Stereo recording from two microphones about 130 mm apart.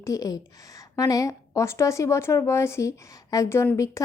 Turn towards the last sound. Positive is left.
turn(degrees=25)  # may be behind; listen again after turning